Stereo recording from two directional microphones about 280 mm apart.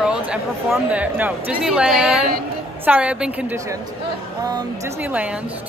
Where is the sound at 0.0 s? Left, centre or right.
Centre.